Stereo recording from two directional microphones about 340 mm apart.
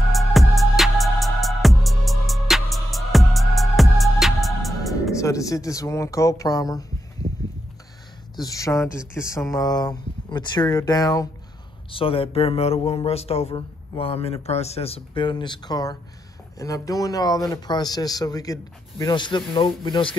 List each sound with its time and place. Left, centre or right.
0.1 s music: centre
7.2 s a sound: right
8.4 s speech: centre